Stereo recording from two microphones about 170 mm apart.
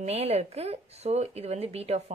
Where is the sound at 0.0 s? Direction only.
35° right (ahead or behind).